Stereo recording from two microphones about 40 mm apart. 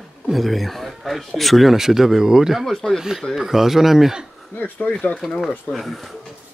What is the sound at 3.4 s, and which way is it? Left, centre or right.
Speech, centre.